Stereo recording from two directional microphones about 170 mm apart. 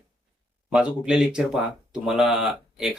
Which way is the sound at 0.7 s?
5° right (ahead or behind).